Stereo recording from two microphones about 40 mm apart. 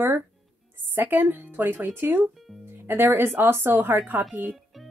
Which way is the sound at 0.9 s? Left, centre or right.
Right.